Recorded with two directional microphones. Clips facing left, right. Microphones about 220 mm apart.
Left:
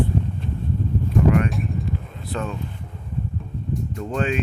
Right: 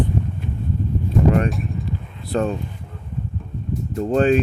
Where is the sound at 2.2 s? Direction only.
35° right (ahead or behind).